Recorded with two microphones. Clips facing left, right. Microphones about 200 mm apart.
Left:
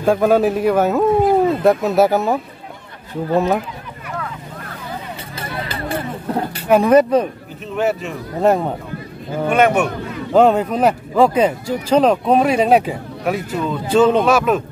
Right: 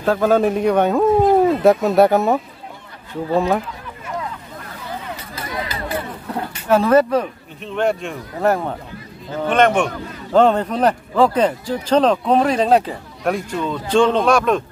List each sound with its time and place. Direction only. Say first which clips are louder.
0.0 s a man's voice: left 2 dB; 10° left (ahead or behind)
5.3 s run: even; 30° left (ahead or behind)
6.7 s speech: left 2 dB; 15° left (ahead or behind)
7.7 s a man's voice: even; 5° left (ahead or behind)
8.4 s a man's voice: left 3 dB; 20° left (ahead or behind)